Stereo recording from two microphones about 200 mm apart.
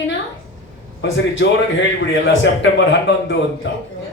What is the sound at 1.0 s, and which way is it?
A woman's voice, 65° left (ahead or behind).